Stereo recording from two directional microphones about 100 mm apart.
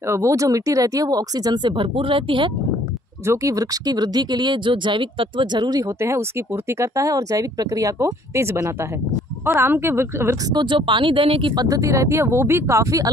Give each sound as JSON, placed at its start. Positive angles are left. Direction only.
{"t": 0.1, "sound": "speech", "side_deg": -30}
{"t": 3.3, "sound": "speech", "side_deg": -35}
{"t": 5.9, "sound": "speech", "side_deg": -30}
{"t": 10.5, "sound": "speech", "side_deg": -50}
{"t": 11.5, "sound": "speech", "side_deg": -35}